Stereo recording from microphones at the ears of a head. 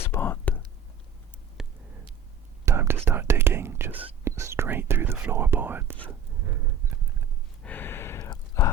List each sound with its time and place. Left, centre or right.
0.0 s whispering: left
2.6 s whispering: right
7.7 s a sound: left